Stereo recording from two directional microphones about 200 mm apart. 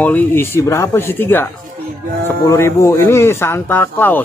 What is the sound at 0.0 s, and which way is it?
Speech, 10° left (ahead or behind).